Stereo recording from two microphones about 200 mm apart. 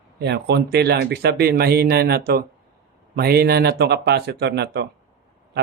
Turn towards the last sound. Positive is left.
turn(degrees=-55)  # may be behind; listen again after turning